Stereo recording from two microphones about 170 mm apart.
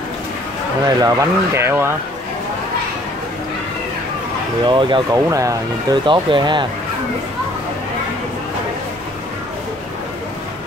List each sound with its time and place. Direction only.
0.8 s speech: 20° right (ahead or behind)
4.6 s speech: 30° right (ahead or behind)